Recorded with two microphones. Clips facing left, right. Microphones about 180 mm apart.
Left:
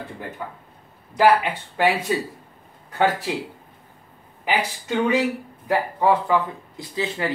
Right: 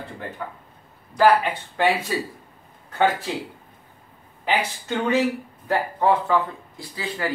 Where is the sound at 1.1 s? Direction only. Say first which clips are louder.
Even; 10° left (ahead or behind).